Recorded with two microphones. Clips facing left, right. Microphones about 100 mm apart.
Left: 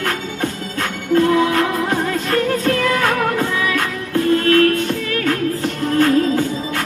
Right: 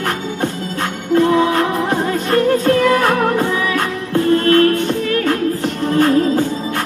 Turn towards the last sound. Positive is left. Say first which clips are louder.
# right 1 dB
turn(degrees=-30)  # may be behind; listen again after turning